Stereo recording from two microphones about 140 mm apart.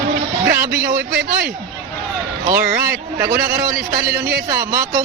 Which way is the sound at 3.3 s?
90° right.